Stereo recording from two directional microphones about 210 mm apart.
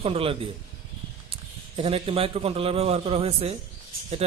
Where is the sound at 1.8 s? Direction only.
25° right (ahead or behind).